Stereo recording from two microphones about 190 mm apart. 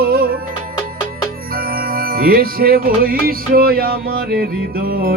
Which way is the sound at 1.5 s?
50° right (ahead or behind).